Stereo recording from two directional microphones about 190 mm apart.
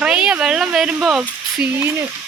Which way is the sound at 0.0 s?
5° right (ahead or behind).